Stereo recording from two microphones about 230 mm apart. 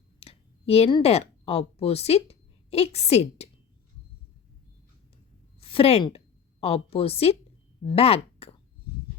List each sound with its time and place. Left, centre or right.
0.2 s speech: left
5.5 s a woman's voice: left